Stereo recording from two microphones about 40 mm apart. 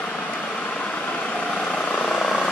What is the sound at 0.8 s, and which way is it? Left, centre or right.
Vehicle, left.